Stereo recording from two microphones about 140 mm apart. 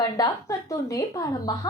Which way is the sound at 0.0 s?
25° left (ahead or behind).